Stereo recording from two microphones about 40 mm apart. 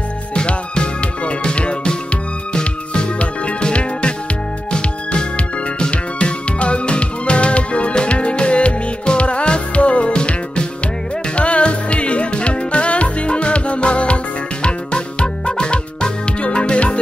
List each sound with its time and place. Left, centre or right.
0.3 s music: left
5.8 s music: left